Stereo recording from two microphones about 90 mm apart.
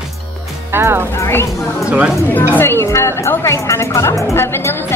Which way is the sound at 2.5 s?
25° left (ahead or behind).